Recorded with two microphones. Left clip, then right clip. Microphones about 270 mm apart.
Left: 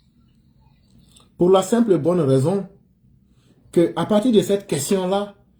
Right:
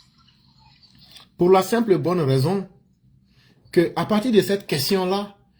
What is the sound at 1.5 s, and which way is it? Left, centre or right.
Speech, right.